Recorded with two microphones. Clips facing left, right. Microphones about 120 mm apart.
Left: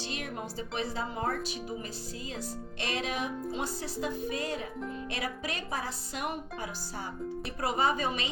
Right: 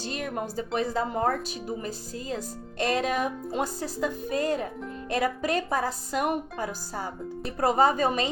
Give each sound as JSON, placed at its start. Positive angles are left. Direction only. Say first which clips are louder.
{"t": 0.0, "sound": "speech", "louder": "right 6 dB", "side_deg": -45}